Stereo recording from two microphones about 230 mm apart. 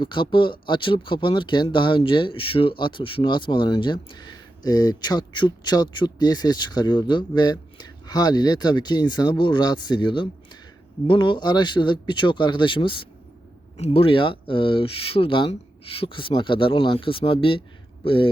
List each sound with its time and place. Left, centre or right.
0.0 s speech: left